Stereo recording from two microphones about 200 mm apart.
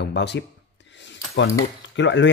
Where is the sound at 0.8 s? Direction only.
60° left (ahead or behind).